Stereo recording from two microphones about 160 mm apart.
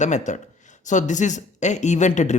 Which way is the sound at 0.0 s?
50° left (ahead or behind).